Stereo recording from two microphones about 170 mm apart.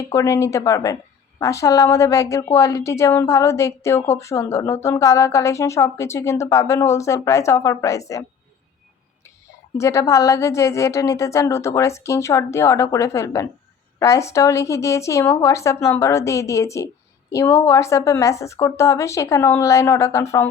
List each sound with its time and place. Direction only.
0.0 s a woman's voice: 20° left (ahead or behind)
9.7 s a woman's voice: 15° left (ahead or behind)